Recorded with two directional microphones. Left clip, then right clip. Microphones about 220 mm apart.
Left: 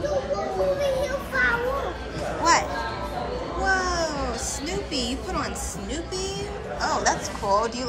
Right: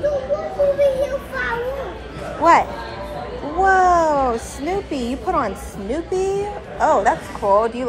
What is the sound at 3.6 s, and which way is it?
Babbling, 15° right (ahead or behind).